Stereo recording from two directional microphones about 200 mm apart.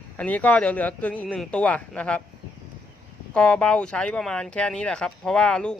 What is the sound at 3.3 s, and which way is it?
Speech, 5° left (ahead or behind).